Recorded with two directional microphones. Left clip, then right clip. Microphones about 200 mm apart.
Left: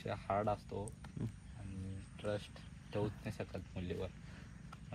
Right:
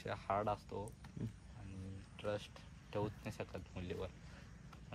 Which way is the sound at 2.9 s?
30° right (ahead or behind).